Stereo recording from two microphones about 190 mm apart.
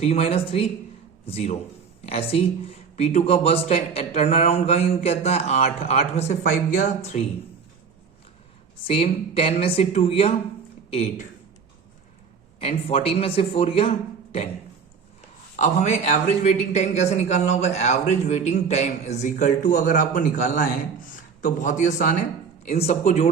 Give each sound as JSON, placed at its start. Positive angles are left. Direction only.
{"t": 0.0, "sound": "a man's voice", "side_deg": 30}
{"t": 8.9, "sound": "a man's voice", "side_deg": 30}
{"t": 12.5, "sound": "a man's voice", "side_deg": 30}
{"t": 15.5, "sound": "a man's voice", "side_deg": 40}